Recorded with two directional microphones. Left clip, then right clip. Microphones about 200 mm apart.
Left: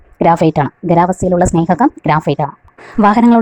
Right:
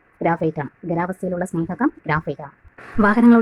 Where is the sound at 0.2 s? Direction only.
35° left (ahead or behind).